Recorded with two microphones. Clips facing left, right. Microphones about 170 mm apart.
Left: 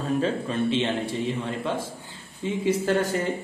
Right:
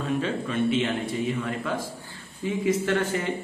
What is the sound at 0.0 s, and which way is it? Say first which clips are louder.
A man's voice: left 2 dB; 35° left (ahead or behind).